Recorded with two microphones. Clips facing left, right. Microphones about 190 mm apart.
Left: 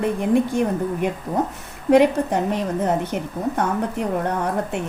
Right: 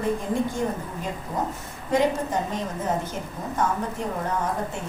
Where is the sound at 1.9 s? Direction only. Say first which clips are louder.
Left 7 dB; 65° left (ahead or behind).